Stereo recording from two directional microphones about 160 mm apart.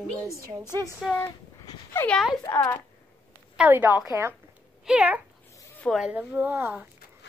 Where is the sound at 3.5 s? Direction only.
10° right (ahead or behind).